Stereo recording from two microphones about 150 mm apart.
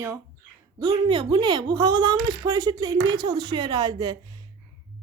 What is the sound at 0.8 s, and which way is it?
Speech, 30° right (ahead or behind).